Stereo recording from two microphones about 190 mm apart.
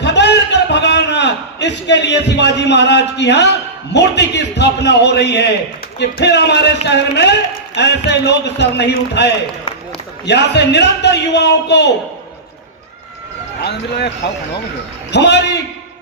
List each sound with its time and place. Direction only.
0.0 s a sound: 65° left (ahead or behind)
3.9 s a man's voice: 65° left (ahead or behind)
15.1 s a man's voice: 65° left (ahead or behind)